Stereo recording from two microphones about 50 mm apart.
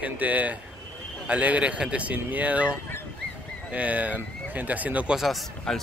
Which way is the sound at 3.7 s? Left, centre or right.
Right.